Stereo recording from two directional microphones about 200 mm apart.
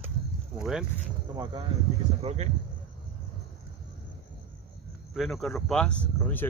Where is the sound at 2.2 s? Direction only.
35° right (ahead or behind).